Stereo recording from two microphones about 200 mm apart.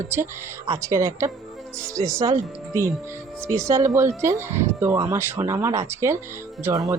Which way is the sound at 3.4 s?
15° right (ahead or behind).